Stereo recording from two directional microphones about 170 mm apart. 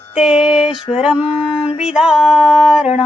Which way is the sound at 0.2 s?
5° right (ahead or behind).